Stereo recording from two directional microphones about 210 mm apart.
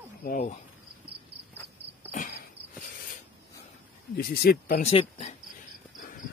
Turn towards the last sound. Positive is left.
turn(degrees=30)  # may be behind; listen again after turning